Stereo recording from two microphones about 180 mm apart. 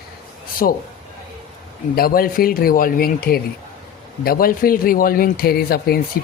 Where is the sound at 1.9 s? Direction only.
55° left (ahead or behind).